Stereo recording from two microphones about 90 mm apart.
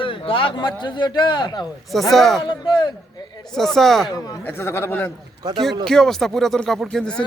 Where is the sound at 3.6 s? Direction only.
5° left (ahead or behind).